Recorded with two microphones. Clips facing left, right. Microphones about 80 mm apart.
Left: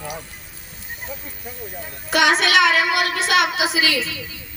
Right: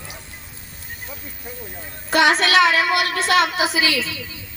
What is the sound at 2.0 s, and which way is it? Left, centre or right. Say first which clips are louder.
Speech: right 1 dB; right.